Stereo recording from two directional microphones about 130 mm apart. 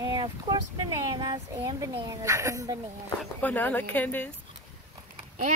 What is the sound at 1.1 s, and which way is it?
Speech, 35° right (ahead or behind).